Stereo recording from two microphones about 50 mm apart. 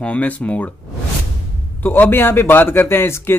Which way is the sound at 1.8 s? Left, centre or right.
Left.